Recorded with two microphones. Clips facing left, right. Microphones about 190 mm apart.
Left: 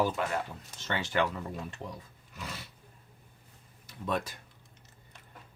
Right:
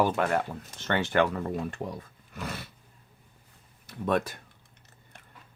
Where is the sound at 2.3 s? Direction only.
55° right (ahead or behind).